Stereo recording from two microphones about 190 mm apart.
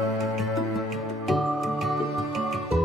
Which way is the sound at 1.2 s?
Centre (ahead or behind).